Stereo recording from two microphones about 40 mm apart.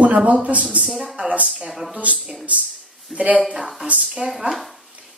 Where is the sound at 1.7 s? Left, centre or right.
Centre.